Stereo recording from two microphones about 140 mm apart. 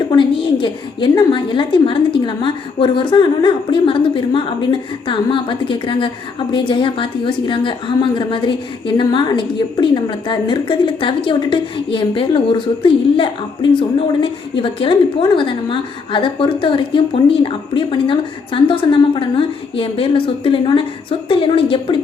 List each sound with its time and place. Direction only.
0.2 s a woman's voice: 35° left (ahead or behind)